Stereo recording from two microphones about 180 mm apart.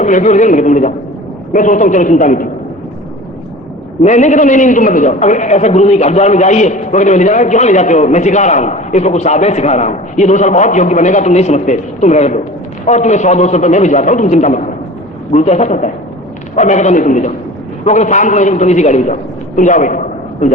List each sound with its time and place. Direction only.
0.0 s a man's voice: 40° left (ahead or behind)
4.0 s a man's voice: 40° left (ahead or behind)
19.5 s a sound: 45° left (ahead or behind)